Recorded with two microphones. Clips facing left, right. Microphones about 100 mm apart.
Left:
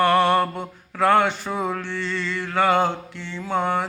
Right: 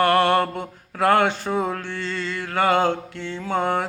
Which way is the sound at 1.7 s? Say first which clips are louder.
Left 1 dB; 50° right (ahead or behind).